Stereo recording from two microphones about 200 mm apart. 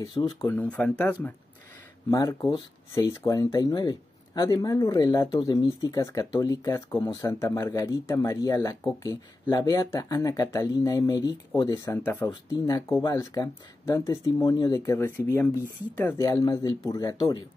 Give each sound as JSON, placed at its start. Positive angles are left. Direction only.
{"t": 0.0, "sound": "speech", "side_deg": 20}
{"t": 0.5, "sound": "speech", "side_deg": 5}